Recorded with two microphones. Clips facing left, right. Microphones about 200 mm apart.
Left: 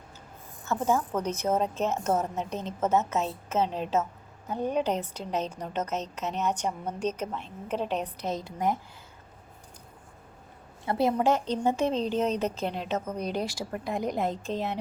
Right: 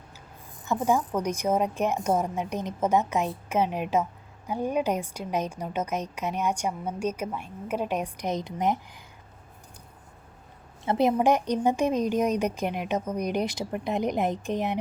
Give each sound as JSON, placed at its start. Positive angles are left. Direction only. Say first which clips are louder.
{"t": 0.6, "sound": "a woman's voice", "louder": "right 2 dB", "side_deg": -15}
{"t": 10.8, "sound": "a woman's voice", "louder": "right 2 dB", "side_deg": -20}